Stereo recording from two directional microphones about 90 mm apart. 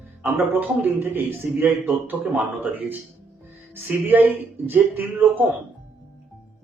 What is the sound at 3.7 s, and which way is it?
Speech, 20° right (ahead or behind).